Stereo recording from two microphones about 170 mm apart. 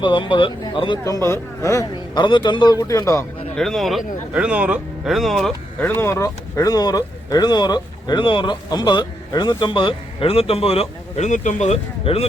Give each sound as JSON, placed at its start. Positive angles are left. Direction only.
{"t": 0.0, "sound": "speech", "side_deg": 30}
{"t": 3.5, "sound": "speech", "side_deg": 5}
{"t": 5.8, "sound": "speech", "side_deg": 15}